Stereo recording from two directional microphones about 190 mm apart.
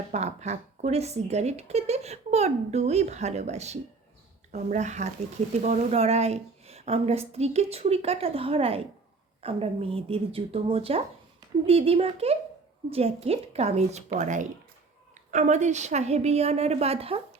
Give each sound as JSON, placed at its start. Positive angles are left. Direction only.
{"t": 0.1, "sound": "speech", "side_deg": -35}